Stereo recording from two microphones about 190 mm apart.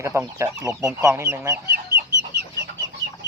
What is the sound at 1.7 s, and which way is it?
Chicken, 60° right (ahead or behind).